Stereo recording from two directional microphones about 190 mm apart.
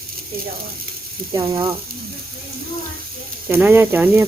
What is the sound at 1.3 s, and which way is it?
Speech, 15° right (ahead or behind).